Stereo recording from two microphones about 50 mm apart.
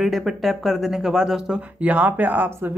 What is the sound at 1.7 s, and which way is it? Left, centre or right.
Speech, right.